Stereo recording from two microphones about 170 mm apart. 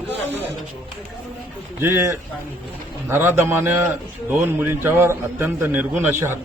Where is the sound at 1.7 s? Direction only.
15° right (ahead or behind).